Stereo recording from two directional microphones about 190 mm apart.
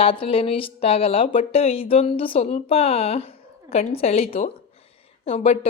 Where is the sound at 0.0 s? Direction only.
30° left (ahead or behind).